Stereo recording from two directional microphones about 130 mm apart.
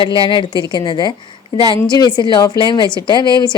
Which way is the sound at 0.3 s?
35° left (ahead or behind).